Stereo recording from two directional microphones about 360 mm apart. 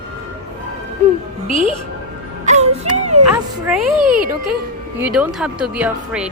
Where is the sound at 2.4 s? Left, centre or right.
Centre.